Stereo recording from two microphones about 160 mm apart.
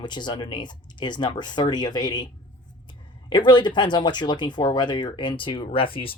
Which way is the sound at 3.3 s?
30° left (ahead or behind).